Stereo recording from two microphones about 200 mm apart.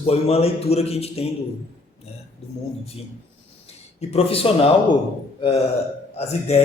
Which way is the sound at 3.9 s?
30° left (ahead or behind).